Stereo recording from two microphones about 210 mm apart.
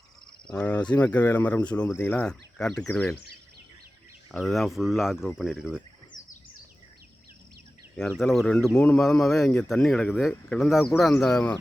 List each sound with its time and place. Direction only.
0.5 s speech: 5° left (ahead or behind)
4.3 s speech: centre (ahead or behind)
6.1 s bird: 20° left (ahead or behind)
8.2 s speech: 5° left (ahead or behind)